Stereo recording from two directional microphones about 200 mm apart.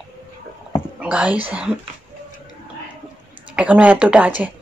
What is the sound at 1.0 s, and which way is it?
Whispering, 5° right (ahead or behind).